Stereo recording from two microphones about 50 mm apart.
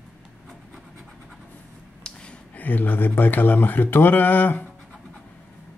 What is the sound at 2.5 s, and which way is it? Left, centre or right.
Speech, left.